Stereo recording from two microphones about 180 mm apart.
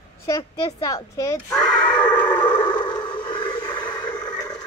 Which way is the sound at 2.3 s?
25° left (ahead or behind).